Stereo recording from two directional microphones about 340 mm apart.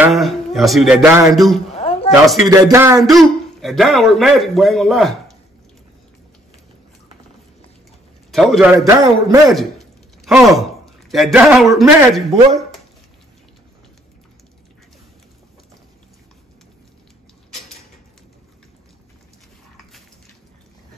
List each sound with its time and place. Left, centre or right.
0.0 s a man's voice: centre
1.7 s a sound: centre
2.2 s a man's voice: centre
8.3 s a man's voice: centre
9.5 s a sound: centre
11.1 s a man's voice: centre